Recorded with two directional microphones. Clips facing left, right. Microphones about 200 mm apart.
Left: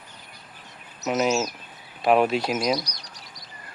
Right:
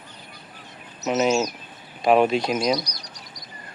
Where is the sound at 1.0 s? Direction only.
Centre (ahead or behind).